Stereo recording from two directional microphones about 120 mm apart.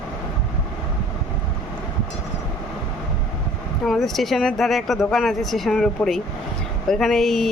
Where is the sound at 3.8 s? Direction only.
Centre (ahead or behind).